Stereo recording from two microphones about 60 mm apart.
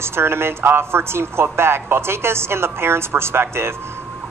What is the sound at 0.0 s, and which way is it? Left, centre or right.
A man's voice, right.